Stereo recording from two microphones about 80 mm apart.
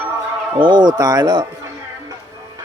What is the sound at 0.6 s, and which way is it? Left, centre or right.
Speech, right.